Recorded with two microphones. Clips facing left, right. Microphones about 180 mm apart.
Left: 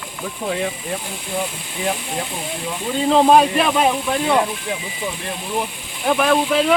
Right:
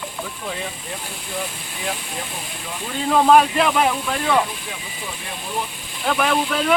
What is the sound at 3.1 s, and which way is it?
Speech, 25° left (ahead or behind).